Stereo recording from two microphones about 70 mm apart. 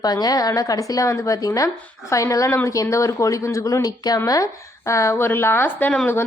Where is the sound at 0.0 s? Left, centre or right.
Left.